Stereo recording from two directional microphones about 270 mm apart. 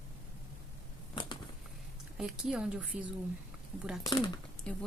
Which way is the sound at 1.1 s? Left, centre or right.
Centre.